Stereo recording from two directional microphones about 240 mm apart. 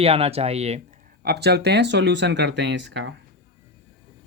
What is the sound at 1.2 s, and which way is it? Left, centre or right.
Speech, right.